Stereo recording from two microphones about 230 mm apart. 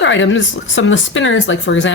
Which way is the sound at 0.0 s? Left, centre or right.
Left.